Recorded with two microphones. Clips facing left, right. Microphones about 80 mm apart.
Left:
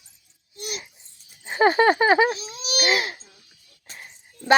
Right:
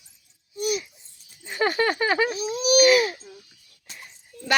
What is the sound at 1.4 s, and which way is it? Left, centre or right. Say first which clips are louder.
Speech: left 6 dB; left.